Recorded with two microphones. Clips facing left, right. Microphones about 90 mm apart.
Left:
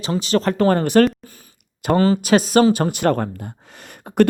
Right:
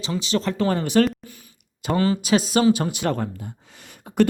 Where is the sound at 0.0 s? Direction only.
45° left (ahead or behind).